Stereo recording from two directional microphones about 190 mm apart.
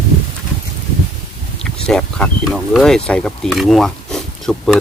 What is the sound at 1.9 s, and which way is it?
Speech, 5° left (ahead or behind).